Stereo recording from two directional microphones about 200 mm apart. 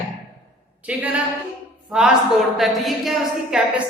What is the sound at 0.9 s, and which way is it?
A woman's voice, 5° right (ahead or behind).